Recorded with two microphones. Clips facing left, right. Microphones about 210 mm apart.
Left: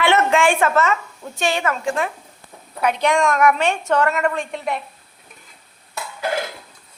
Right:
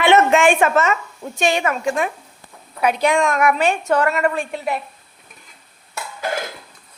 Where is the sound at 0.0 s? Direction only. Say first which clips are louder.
Right 3 dB; 20° right (ahead or behind); by 4.8 s 5° right (ahead or behind).